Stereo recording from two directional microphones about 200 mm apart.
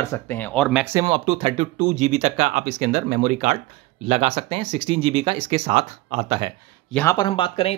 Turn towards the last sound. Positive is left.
turn(degrees=25)  # may be behind; listen again after turning